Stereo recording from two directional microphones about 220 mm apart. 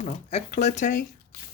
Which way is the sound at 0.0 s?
30° left (ahead or behind).